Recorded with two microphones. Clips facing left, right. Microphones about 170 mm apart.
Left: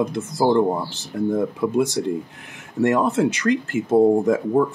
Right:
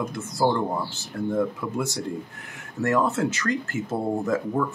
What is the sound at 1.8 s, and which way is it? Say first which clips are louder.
Speech: left 8 dB; 20° left (ahead or behind).